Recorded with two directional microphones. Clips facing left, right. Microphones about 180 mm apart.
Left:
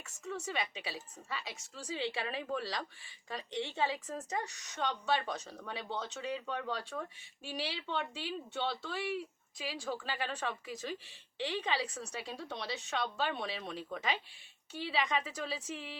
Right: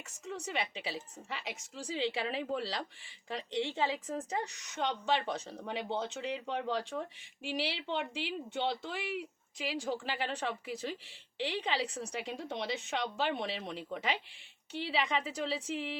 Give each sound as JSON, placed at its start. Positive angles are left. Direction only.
{"t": 0.3, "sound": "a woman's voice", "side_deg": -15}